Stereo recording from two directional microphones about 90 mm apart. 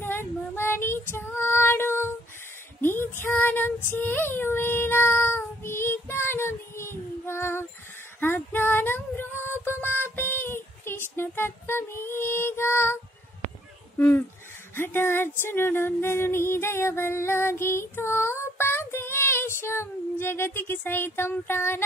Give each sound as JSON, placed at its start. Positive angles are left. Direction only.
{"t": 0.0, "sound": "female singing", "side_deg": 25}
{"t": 2.8, "sound": "child singing", "side_deg": 25}
{"t": 13.9, "sound": "speech", "side_deg": 25}
{"t": 14.8, "sound": "a sound", "side_deg": 25}